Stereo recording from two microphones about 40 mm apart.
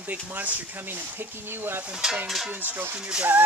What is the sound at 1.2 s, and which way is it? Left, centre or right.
Speech, right.